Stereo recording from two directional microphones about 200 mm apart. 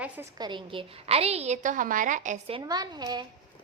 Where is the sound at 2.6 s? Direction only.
20° right (ahead or behind).